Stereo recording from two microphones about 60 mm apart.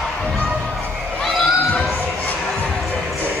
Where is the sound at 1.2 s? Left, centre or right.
Centre.